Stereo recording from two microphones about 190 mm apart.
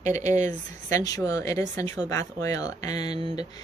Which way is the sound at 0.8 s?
20° left (ahead or behind).